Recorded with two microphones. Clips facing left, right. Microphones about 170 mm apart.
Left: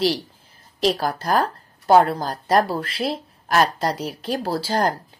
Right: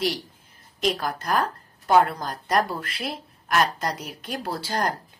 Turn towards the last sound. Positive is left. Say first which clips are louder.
# left 5 dB
turn(degrees=30)  # may be behind; listen again after turning